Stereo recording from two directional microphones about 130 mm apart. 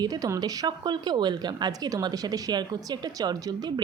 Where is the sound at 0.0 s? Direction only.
30° right (ahead or behind).